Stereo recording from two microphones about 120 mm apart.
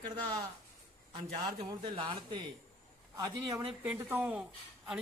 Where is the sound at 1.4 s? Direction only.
45° right (ahead or behind).